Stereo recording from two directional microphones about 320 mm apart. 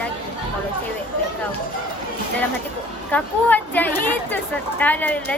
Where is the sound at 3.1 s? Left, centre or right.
Centre.